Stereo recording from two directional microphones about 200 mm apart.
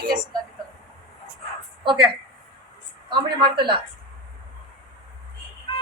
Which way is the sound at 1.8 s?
25° right (ahead or behind).